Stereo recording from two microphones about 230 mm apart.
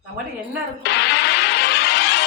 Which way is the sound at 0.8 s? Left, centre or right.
Left.